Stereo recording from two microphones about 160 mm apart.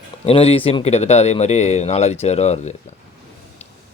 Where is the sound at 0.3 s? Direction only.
35° left (ahead or behind).